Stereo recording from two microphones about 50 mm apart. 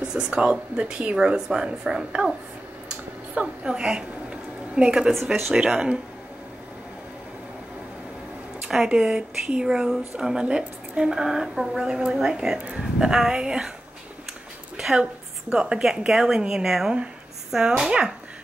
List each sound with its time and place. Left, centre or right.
0.0 s a woman's voice: centre
2.9 s a sound: centre
4.7 s a woman's voice: centre
8.6 s a woman's voice: centre
15.5 s a woman's voice: centre